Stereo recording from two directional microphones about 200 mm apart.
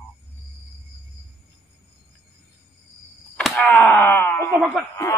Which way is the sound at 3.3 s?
5° left (ahead or behind).